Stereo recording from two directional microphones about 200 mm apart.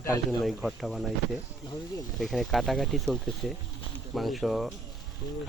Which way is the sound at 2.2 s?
Centre (ahead or behind).